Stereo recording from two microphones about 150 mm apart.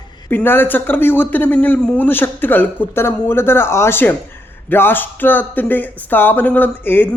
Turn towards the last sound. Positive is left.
turn(degrees=15)  # may be behind; listen again after turning